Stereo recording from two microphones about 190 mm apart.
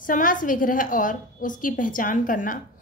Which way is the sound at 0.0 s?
45° left (ahead or behind).